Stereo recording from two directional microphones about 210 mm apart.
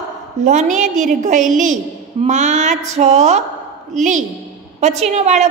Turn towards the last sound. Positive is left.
turn(degrees=-35)  # may be behind; listen again after turning